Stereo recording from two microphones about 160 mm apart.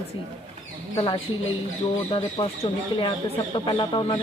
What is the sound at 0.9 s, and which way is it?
Speech, 25° left (ahead or behind).